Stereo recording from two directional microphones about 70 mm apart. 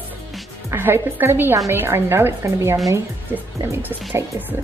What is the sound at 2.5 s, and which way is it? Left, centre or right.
Speech, right.